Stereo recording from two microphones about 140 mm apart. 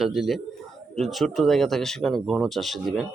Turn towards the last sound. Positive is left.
turn(degrees=0)  # may be behind; listen again after turning